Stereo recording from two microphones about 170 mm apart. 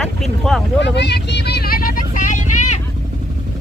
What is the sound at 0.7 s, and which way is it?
Vehicle, 90° left.